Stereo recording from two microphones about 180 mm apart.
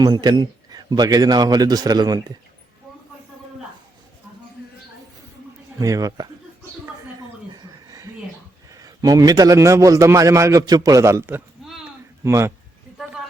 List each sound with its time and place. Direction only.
0.0 s speech: 25° right (ahead or behind)
5.8 s speech: 20° right (ahead or behind)
7.5 s a sound: 20° right (ahead or behind)
8.7 s a man's voice: 20° right (ahead or behind)